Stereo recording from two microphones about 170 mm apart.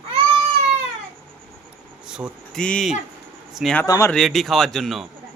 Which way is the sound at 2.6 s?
5° left (ahead or behind).